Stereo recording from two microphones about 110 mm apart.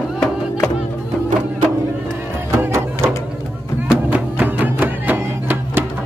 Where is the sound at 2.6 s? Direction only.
25° right (ahead or behind).